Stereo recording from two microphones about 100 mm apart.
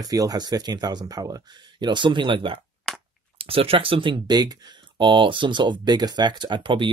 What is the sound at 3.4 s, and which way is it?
Speech, 70° right (ahead or behind).